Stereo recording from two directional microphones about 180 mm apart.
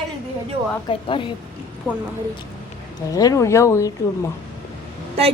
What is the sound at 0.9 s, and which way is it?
Speech, 30° left (ahead or behind).